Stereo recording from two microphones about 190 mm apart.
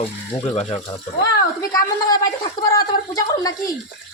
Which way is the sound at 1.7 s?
20° left (ahead or behind).